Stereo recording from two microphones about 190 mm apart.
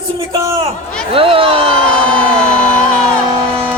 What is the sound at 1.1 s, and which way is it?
Speech, 30° right (ahead or behind).